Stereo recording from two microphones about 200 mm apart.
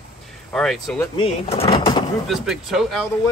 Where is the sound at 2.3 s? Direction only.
Centre (ahead or behind).